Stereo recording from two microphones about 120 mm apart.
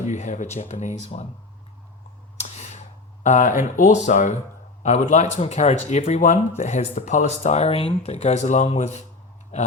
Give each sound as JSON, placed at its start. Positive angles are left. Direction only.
{"t": 0.0, "sound": "speech", "side_deg": 80}
{"t": 3.2, "sound": "speech", "side_deg": 90}
{"t": 4.8, "sound": "speech", "side_deg": 80}